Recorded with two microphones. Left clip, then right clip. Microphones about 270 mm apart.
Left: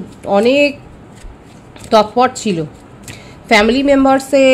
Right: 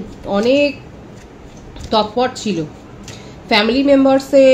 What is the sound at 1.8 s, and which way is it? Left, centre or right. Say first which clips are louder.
A woman's voice: left 5 dB; left.